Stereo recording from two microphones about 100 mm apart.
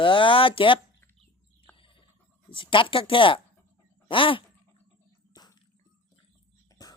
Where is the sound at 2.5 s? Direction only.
60° left (ahead or behind).